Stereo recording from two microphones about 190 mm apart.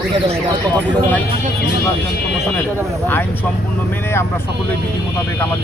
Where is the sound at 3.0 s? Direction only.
10° left (ahead or behind).